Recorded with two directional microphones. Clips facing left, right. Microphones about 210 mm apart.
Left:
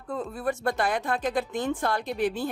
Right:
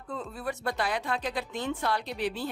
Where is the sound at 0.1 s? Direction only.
50° left (ahead or behind).